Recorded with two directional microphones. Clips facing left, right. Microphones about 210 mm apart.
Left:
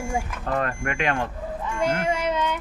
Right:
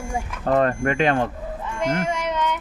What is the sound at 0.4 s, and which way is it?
Speech, 35° right (ahead or behind).